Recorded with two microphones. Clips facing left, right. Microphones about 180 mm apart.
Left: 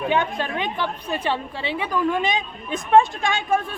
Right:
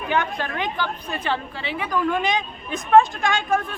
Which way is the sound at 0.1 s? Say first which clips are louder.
Right 1 dB; 25° left (ahead or behind).